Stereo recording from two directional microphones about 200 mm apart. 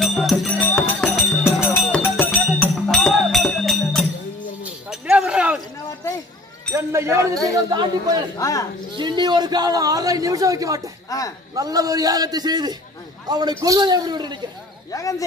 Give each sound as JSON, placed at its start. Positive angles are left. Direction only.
{"t": 0.0, "sound": "music", "side_deg": 0}
{"t": 4.8, "sound": "a sound", "side_deg": -5}
{"t": 6.7, "sound": "a sound", "side_deg": -15}
{"t": 7.5, "sound": "a man's voice", "side_deg": -20}
{"t": 8.4, "sound": "speech", "side_deg": 15}
{"t": 8.9, "sound": "a man's voice", "side_deg": -25}
{"t": 11.1, "sound": "speech", "side_deg": 15}
{"t": 11.5, "sound": "a man's voice", "side_deg": -20}
{"t": 14.9, "sound": "speech", "side_deg": 15}